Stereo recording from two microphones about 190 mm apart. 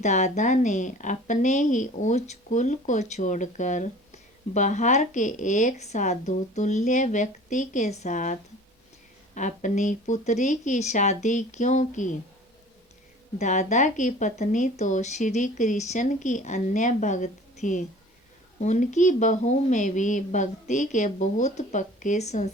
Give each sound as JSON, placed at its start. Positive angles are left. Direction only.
{"t": 0.0, "sound": "a woman's voice", "side_deg": 35}
{"t": 13.4, "sound": "a woman's voice", "side_deg": 40}